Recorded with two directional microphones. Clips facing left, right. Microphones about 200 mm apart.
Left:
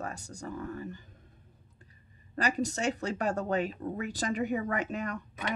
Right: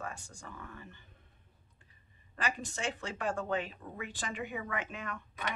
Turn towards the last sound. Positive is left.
turn(degrees=40)  # may be behind; listen again after turning